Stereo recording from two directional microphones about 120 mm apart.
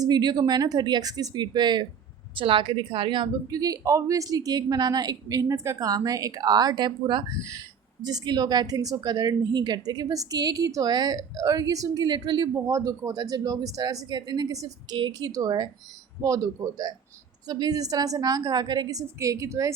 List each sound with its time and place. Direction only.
0.0 s a woman's voice: 35° right (ahead or behind)
7.3 s a woman's voice: 25° right (ahead or behind)
14.9 s speech: 45° right (ahead or behind)
15.3 s a woman's voice: 30° right (ahead or behind)